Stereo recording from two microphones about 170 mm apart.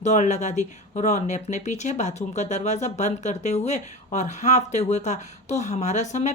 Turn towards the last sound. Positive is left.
turn(degrees=45)  # may be behind; listen again after turning